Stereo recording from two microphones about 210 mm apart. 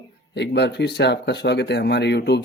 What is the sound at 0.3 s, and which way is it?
Speech, 55° left (ahead or behind).